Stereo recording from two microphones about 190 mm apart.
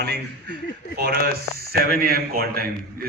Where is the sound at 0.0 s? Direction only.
60° right (ahead or behind).